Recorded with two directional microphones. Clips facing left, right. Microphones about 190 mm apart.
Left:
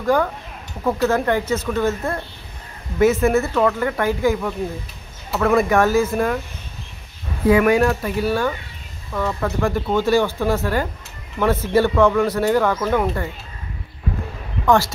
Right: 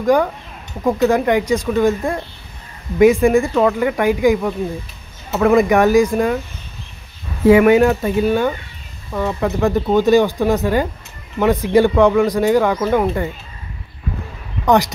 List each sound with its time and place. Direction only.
0.0 s speech: 15° right (ahead or behind)
7.4 s speech: 25° right (ahead or behind)